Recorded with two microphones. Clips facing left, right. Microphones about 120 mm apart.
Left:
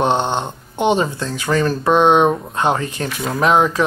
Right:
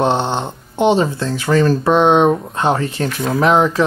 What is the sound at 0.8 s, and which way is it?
Speech, 15° left (ahead or behind).